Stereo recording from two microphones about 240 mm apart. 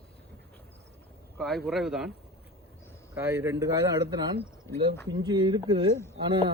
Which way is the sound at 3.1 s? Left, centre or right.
Centre.